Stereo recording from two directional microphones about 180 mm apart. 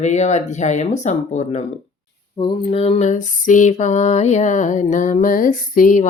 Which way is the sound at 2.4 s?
30° left (ahead or behind).